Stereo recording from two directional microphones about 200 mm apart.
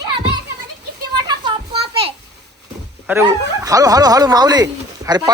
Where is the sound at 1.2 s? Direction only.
20° right (ahead or behind).